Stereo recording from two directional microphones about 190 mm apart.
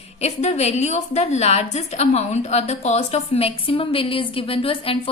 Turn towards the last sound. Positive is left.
turn(degrees=30)  # may be behind; listen again after turning